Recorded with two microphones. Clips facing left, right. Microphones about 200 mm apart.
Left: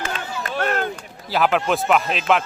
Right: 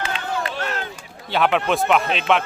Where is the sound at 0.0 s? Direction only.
45° left (ahead or behind).